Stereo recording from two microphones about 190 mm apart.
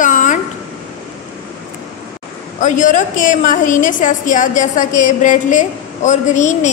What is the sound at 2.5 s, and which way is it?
A woman's voice, 40° left (ahead or behind).